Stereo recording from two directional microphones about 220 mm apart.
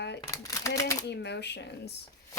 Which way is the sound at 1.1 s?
50° left (ahead or behind).